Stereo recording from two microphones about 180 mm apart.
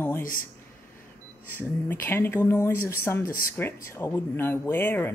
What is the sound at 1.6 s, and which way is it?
Speech, 10° left (ahead or behind).